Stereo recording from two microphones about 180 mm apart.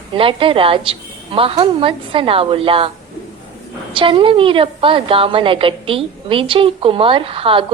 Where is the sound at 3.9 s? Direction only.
30° right (ahead or behind).